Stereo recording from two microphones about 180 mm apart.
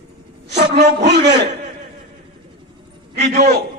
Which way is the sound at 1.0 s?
70° right (ahead or behind).